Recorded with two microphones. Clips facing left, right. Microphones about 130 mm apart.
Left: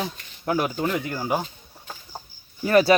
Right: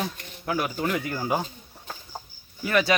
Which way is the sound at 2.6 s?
35° left (ahead or behind).